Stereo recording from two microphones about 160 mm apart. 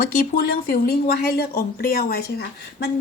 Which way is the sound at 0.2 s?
65° left (ahead or behind).